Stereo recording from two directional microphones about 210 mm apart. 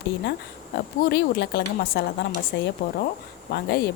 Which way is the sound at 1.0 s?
55° left (ahead or behind).